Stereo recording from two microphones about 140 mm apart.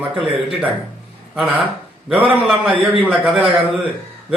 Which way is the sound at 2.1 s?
10° right (ahead or behind).